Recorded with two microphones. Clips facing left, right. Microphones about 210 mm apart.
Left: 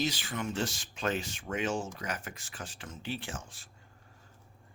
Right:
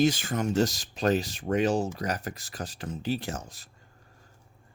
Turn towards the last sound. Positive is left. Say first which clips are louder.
# right 6 dB
turn(degrees=-40)  # may be behind; listen again after turning